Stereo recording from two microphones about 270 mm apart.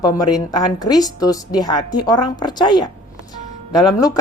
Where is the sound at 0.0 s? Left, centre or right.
Centre.